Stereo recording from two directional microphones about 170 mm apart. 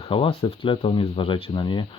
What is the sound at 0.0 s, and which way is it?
Speech, 35° left (ahead or behind).